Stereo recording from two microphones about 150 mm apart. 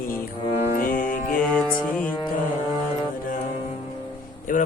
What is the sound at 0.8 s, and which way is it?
Music, 70° left (ahead or behind).